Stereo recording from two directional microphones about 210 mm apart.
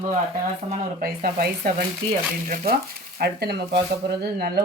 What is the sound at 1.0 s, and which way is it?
Speech, 45° right (ahead or behind).